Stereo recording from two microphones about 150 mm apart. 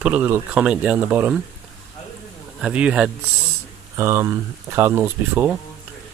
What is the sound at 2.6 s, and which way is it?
Speech, 5° right (ahead or behind).